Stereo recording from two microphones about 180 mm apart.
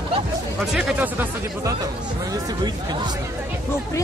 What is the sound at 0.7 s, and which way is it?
Speech, 5° right (ahead or behind).